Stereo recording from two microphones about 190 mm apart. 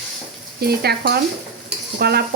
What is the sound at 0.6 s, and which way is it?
Stir, 55° right (ahead or behind).